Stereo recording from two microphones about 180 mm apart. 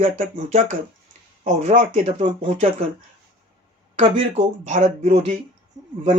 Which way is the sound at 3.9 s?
40° right (ahead or behind).